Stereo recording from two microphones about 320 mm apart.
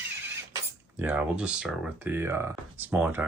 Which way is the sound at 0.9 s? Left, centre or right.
Centre.